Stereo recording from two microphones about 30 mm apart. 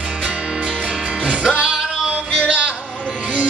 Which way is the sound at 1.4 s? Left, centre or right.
Right.